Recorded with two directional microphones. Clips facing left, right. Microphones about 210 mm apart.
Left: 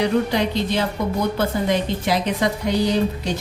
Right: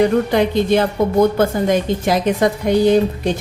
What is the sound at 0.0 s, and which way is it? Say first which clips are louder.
A woman's voice: right 5 dB; 50° right (ahead or behind).